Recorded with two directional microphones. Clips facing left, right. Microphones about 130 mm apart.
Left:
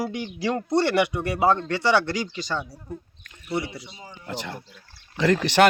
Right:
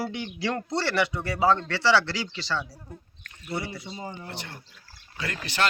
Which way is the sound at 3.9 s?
55° right (ahead or behind).